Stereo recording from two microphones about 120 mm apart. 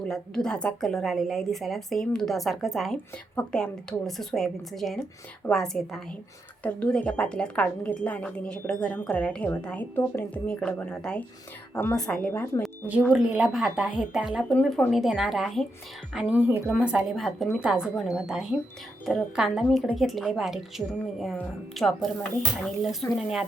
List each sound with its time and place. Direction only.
0.0 s a woman's voice: 5° left (ahead or behind); by 11.9 s 20° left (ahead or behind)
11.9 s speech: 5° left (ahead or behind)
12.3 s a woman's voice: 20° left (ahead or behind)
12.8 s speech: 10° right (ahead or behind)
14.5 s speech: 5° left (ahead or behind)
16.1 s speech: 10° right (ahead or behind)